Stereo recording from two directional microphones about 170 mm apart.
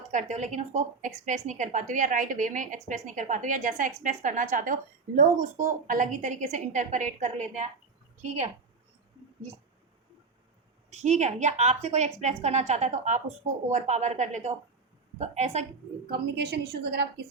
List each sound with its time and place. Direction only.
0.1 s a woman's voice: 45° right (ahead or behind)
10.9 s a woman's voice: 40° right (ahead or behind)
16.0 s a woman's voice: 75° right (ahead or behind)